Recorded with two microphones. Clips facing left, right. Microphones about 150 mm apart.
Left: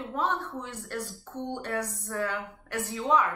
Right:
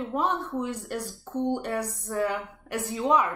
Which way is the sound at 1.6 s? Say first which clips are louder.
Right 2 dB; 20° right (ahead or behind).